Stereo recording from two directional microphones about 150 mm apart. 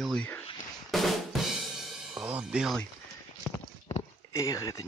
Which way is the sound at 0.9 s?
Centre (ahead or behind).